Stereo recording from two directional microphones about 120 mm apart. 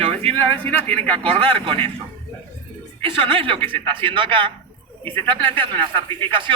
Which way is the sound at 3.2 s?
45° right (ahead or behind).